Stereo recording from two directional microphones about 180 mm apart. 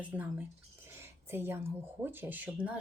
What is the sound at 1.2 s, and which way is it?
Speech, 15° right (ahead or behind).